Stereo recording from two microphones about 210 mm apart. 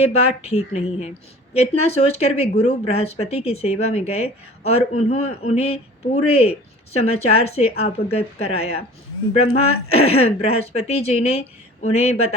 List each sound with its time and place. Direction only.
0.0 s speech: 30° left (ahead or behind)